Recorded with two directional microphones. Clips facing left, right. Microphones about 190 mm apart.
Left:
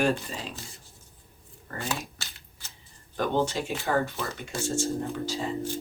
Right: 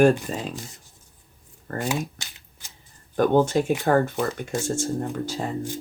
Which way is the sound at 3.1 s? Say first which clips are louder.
Right 8 dB; 50° right (ahead or behind).